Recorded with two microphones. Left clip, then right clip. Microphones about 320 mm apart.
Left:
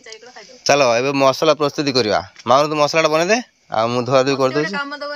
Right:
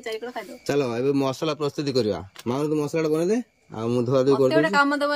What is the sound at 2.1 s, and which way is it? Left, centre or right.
A man's voice, left.